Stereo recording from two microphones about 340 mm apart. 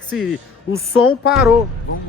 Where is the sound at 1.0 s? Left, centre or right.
Left.